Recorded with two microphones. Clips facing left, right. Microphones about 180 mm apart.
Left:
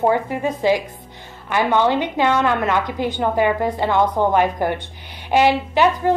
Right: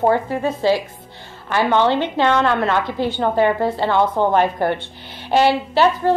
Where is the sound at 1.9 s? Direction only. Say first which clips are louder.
Right 1 dB; 15° left (ahead or behind).